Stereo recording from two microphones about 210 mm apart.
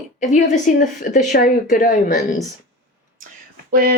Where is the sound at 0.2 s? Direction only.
35° left (ahead or behind).